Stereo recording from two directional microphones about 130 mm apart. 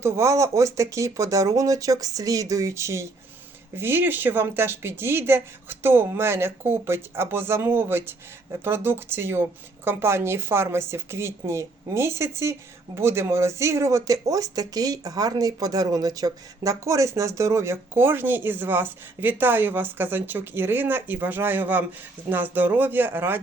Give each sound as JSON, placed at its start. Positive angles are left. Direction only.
{"t": 0.0, "sound": "speech", "side_deg": -20}